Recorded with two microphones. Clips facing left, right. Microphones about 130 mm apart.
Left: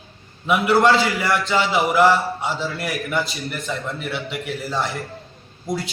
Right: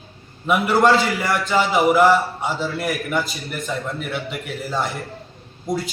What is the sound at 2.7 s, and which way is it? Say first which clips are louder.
A man's voice: right 1 dB; centre (ahead or behind).